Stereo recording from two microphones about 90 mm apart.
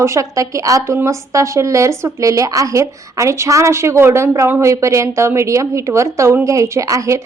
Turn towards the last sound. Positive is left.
turn(degrees=-35)  # may be behind; listen again after turning